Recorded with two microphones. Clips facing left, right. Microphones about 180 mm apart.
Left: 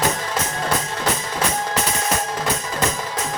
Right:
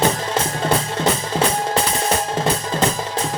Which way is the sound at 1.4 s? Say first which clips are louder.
Right 4 dB; 30° right (ahead or behind).